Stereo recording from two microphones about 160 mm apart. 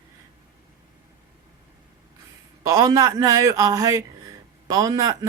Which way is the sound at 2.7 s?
20° right (ahead or behind).